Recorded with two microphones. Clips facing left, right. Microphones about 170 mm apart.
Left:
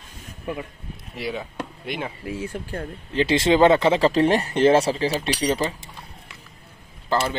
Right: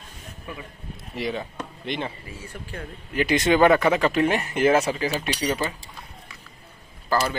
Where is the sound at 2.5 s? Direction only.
45° left (ahead or behind).